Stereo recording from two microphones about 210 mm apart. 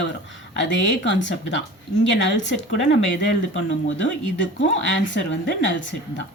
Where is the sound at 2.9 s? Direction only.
60° left (ahead or behind).